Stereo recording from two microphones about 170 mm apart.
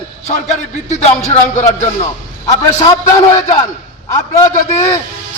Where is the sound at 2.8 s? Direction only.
25° left (ahead or behind).